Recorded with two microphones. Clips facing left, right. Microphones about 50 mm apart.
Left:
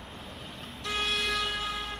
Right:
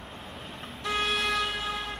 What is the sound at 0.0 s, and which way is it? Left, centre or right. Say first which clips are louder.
Vehicle: right 2 dB; centre.